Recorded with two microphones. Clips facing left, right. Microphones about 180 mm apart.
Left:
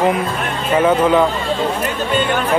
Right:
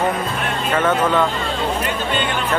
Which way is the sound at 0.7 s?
10° left (ahead or behind).